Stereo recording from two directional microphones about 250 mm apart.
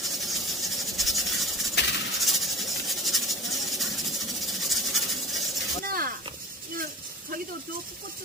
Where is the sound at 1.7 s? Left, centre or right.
Left.